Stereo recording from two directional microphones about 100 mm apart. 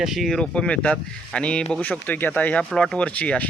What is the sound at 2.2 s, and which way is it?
Speech, 15° left (ahead or behind).